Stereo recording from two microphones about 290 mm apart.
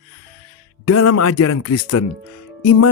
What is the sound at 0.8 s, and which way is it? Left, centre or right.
Speech, left.